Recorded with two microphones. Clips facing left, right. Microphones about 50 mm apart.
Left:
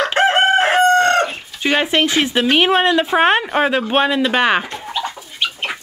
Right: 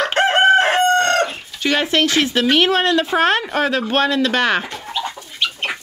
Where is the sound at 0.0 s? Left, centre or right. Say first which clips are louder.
Even; centre.